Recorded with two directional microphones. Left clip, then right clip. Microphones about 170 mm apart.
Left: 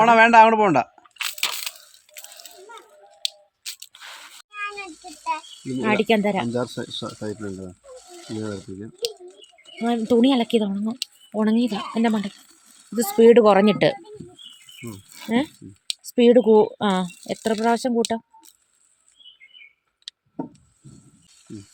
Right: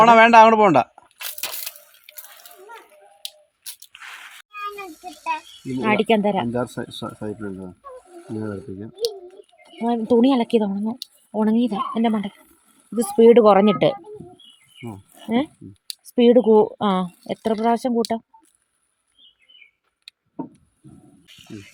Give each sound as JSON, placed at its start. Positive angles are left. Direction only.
{"t": 0.0, "sound": "speech", "side_deg": -35}
{"t": 1.5, "sound": "a sound", "side_deg": 15}
{"t": 5.8, "sound": "speech", "side_deg": -5}
{"t": 6.5, "sound": "speech", "side_deg": -40}
{"t": 9.8, "sound": "speech", "side_deg": 0}
{"t": 15.3, "sound": "speech", "side_deg": -5}